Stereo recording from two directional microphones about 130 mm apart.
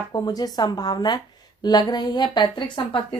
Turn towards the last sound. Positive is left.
turn(degrees=40)  # may be behind; listen again after turning